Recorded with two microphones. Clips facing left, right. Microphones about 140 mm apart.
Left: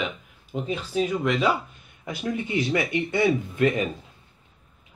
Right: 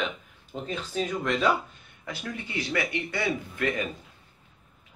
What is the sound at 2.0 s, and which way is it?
Speech, 20° left (ahead or behind).